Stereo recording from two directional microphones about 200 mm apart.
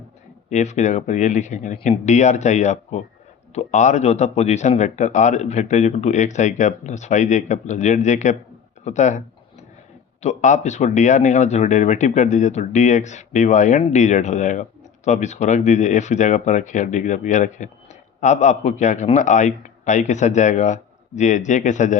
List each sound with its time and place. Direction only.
0.5 s speech: 35° left (ahead or behind)
8.8 s a sound: 35° left (ahead or behind)
10.2 s speech: 35° left (ahead or behind)